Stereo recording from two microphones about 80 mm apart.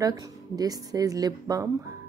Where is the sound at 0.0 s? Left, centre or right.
Right.